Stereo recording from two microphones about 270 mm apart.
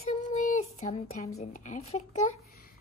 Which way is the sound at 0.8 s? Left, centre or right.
Left.